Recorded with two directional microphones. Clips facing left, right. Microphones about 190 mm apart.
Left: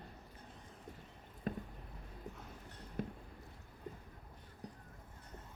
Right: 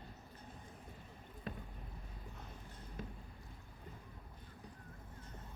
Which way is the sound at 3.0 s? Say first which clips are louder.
Left 7 dB; 60° left (ahead or behind).